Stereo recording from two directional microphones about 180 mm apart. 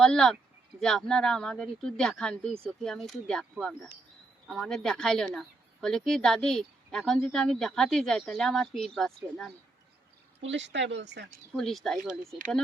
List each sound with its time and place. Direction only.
0.0 s speech: 5° left (ahead or behind)
10.4 s speech: 90° right; by 11.3 s 70° right (ahead or behind)
11.5 s speech: centre (ahead or behind)